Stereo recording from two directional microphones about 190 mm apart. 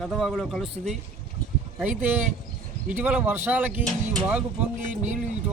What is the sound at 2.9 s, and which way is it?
Speech, 10° right (ahead or behind).